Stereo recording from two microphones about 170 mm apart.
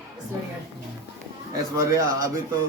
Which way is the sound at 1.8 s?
20° right (ahead or behind).